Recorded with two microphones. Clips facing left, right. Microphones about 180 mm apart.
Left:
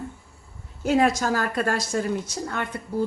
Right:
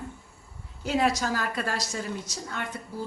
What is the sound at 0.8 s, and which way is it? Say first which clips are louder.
A woman's voice: left 5 dB; 50° left (ahead or behind).